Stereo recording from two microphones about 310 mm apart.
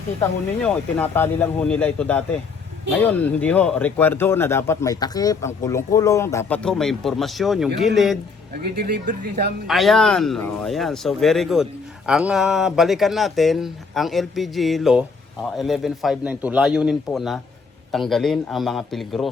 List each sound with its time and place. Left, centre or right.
0.2 s speech: centre
8.6 s speech: right
9.6 s speech: centre